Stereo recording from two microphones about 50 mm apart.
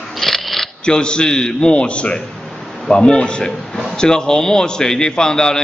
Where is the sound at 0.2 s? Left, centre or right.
Centre.